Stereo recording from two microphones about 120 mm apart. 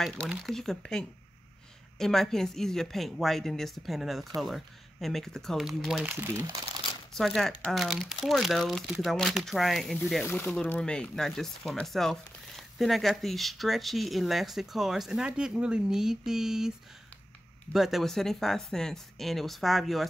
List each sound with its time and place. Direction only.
0.0 s speech: centre (ahead or behind)
6.0 s speech: 20° right (ahead or behind)
7.2 s speech: centre (ahead or behind)
10.2 s speech: 15° left (ahead or behind); by 16.7 s 5° right (ahead or behind)
17.7 s speech: centre (ahead or behind)